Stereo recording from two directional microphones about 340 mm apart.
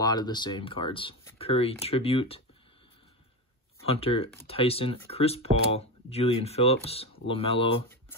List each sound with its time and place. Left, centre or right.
0.0 s speech: centre
3.8 s speech: centre